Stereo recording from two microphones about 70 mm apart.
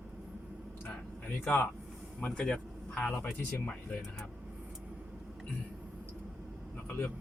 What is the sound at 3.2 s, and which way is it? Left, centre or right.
Speech, left.